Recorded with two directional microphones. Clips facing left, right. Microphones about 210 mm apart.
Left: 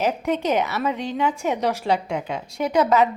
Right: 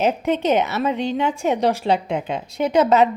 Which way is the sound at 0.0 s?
25° right (ahead or behind).